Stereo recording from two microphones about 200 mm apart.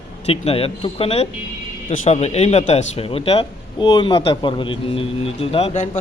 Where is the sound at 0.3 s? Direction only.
30° left (ahead or behind).